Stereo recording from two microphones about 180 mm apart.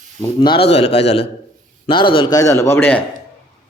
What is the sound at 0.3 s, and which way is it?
A man's voice, 30° left (ahead or behind).